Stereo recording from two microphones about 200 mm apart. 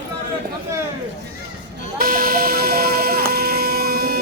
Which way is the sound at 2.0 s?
45° right (ahead or behind).